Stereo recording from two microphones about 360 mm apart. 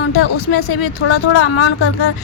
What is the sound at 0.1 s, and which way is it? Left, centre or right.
Speech, left.